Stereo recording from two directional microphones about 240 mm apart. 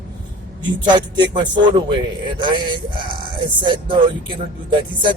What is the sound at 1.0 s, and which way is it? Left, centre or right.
Music, centre.